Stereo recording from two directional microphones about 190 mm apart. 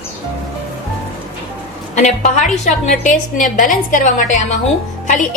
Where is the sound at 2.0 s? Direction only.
40° left (ahead or behind).